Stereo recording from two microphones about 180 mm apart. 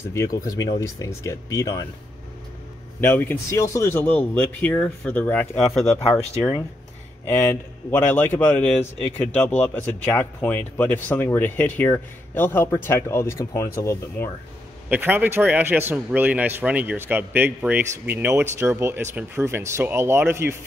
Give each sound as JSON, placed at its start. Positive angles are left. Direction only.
{"t": 0.1, "sound": "speech", "side_deg": 15}
{"t": 3.0, "sound": "speech", "side_deg": 10}
{"t": 7.2, "sound": "speech", "side_deg": 10}
{"t": 14.9, "sound": "a man's voice", "side_deg": -10}